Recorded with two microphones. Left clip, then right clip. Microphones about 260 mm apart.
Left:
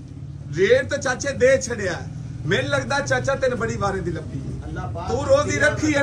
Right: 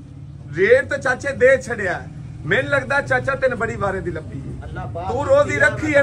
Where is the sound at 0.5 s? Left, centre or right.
Centre.